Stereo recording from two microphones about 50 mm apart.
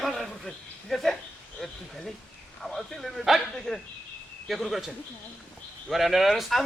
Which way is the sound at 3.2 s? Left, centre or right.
Centre.